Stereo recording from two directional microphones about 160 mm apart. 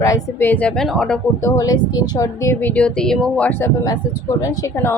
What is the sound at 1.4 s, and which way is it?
Speech, 25° left (ahead or behind).